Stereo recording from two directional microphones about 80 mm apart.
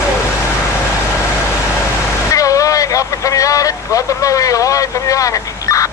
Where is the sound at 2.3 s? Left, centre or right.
Left.